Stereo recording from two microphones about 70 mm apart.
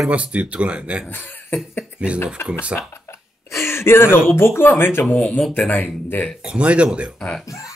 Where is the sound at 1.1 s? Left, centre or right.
Left.